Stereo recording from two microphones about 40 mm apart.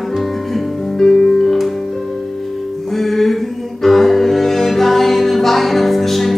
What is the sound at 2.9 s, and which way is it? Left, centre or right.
Music, centre.